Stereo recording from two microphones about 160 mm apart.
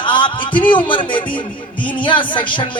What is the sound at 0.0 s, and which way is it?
Music, 30° left (ahead or behind).